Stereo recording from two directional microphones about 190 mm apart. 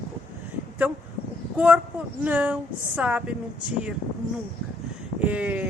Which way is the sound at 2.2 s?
5° right (ahead or behind).